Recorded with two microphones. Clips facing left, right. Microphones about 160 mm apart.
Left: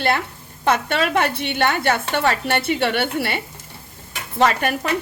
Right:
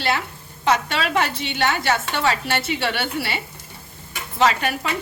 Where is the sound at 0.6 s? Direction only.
55° left (ahead or behind).